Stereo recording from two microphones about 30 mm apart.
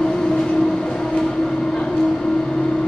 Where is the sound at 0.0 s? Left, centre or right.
Left.